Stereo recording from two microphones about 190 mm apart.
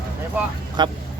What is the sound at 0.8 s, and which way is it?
Speech, 20° right (ahead or behind).